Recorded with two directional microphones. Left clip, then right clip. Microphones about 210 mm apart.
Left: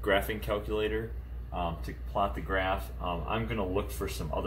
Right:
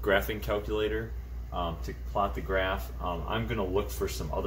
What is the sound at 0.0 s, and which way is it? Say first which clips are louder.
Speech: right 1 dB; 20° right (ahead or behind).